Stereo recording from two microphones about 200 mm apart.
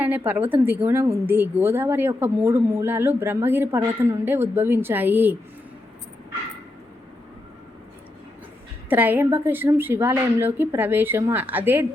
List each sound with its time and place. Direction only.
0.3 s a woman's voice: 10° right (ahead or behind)
8.9 s a woman's voice: 10° right (ahead or behind)